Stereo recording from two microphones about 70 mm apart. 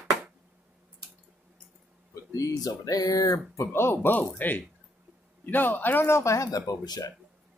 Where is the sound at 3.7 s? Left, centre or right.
Left.